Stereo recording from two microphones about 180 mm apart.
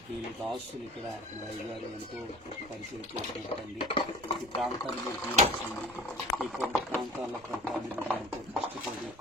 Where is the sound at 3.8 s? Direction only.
30° left (ahead or behind).